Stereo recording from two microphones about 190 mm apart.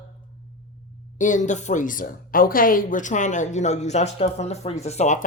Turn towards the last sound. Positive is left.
turn(degrees=35)  # may be behind; listen again after turning